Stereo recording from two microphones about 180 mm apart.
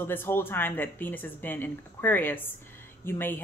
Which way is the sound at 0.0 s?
10° left (ahead or behind).